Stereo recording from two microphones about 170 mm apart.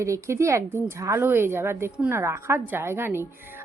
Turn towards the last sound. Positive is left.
turn(degrees=-15)  # may be behind; listen again after turning